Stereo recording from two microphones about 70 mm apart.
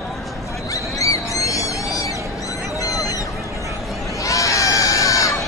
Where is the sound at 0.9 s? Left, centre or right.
Left.